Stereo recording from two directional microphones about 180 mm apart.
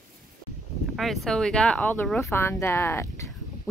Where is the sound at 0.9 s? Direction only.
Centre (ahead or behind).